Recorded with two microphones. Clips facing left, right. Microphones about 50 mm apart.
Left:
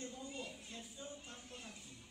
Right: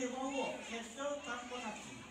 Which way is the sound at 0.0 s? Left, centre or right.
Right.